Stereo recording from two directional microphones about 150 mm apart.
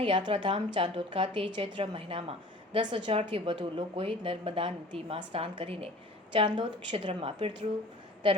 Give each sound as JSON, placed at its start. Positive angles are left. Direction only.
{"t": 0.0, "sound": "a woman's voice", "side_deg": -30}